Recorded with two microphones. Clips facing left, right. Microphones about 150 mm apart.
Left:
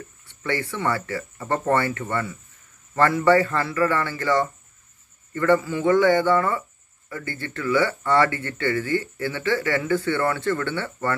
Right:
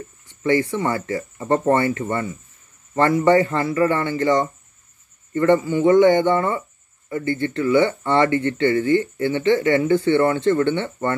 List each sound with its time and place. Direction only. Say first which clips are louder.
0.3 s speech: right 8 dB; 20° right (ahead or behind)
2.9 s a sound: right 2 dB; 20° right (ahead or behind)
3.3 s speech: right 2 dB; 20° right (ahead or behind)